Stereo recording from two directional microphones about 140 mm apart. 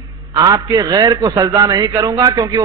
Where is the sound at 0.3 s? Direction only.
30° right (ahead or behind).